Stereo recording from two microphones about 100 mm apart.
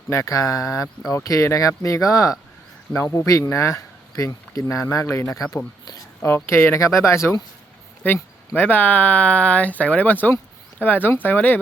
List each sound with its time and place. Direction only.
0.1 s speech: 30° left (ahead or behind)